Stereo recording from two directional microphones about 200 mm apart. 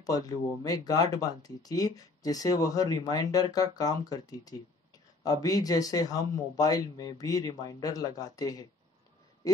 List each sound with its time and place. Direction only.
0.0 s speech: 20° left (ahead or behind)